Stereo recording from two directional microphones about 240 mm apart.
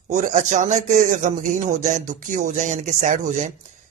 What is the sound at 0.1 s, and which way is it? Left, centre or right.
A man's voice, right.